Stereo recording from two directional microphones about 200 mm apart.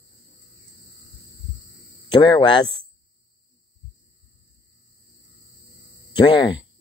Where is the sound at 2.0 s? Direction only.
20° left (ahead or behind).